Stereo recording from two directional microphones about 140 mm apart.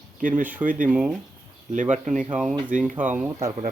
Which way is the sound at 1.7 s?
60° right (ahead or behind).